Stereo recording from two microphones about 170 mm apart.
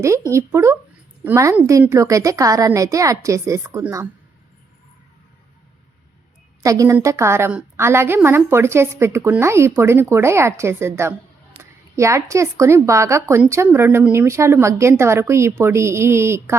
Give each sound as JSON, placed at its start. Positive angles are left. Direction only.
{"t": 0.3, "sound": "a woman's voice", "side_deg": -15}
{"t": 6.6, "sound": "a woman's voice", "side_deg": -20}